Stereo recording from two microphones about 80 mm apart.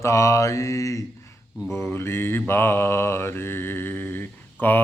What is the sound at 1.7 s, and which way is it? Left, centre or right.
Mantra, left.